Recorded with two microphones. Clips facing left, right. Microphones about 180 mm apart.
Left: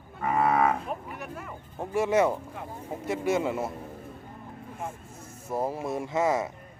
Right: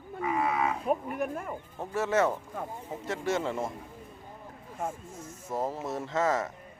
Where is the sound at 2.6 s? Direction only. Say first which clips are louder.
Right 2 dB; 45° right (ahead or behind).